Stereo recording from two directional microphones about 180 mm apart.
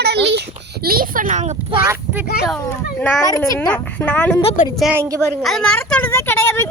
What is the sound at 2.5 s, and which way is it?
A child's voice, 5° left (ahead or behind).